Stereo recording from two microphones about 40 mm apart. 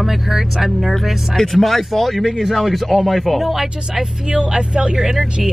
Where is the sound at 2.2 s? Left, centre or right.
Centre.